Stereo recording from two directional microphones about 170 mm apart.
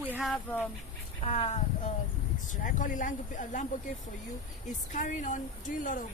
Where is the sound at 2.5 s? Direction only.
50° left (ahead or behind).